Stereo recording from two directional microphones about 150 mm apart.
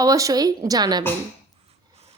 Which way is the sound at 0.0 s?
25° right (ahead or behind).